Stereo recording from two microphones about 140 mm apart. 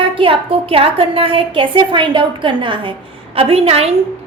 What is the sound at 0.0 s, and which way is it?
A woman's voice, 40° right (ahead or behind).